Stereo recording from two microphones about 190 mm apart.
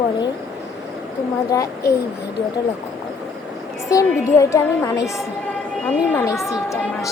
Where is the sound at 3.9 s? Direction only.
15° left (ahead or behind).